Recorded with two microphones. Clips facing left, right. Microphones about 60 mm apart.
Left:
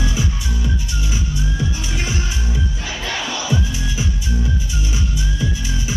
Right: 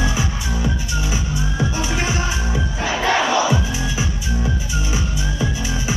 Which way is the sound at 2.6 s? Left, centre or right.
Right.